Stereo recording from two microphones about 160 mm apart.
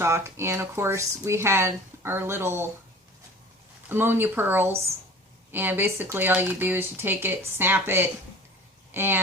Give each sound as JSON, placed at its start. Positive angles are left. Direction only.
{"t": 0.0, "sound": "speech", "side_deg": -15}
{"t": 3.8, "sound": "a woman's voice", "side_deg": -15}